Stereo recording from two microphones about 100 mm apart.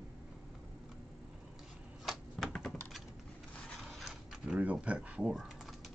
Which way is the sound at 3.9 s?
5° right (ahead or behind).